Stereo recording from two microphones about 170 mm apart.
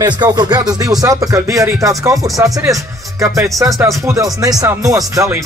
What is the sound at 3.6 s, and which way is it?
Speech, 20° right (ahead or behind).